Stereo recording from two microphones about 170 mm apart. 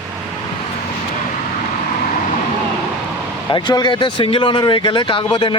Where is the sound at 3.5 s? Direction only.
25° left (ahead or behind).